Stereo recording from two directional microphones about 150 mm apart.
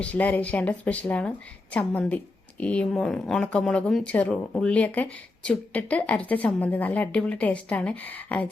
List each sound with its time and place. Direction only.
0.0 s speech: 10° left (ahead or behind)